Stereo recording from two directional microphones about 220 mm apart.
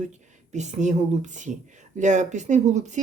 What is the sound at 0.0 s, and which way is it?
Speech, 30° right (ahead or behind).